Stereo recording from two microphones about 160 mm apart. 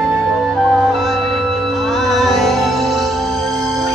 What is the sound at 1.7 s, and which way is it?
Music, centre (ahead or behind).